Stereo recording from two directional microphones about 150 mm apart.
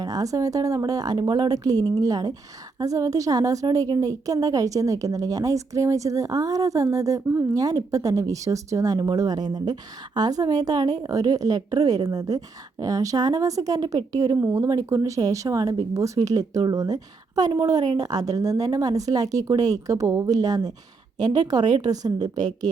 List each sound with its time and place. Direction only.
0.0 s a woman's voice: 25° right (ahead or behind)